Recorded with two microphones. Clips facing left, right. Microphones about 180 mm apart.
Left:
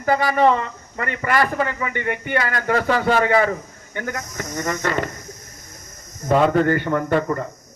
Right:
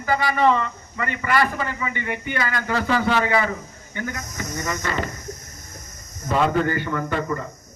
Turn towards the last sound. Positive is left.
turn(degrees=45)  # may be behind; listen again after turning